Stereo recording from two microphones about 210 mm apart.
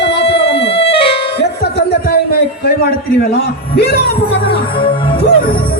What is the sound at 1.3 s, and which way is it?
Music, 50° left (ahead or behind).